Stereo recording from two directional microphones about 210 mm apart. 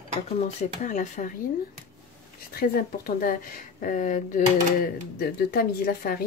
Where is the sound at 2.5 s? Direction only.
45° left (ahead or behind).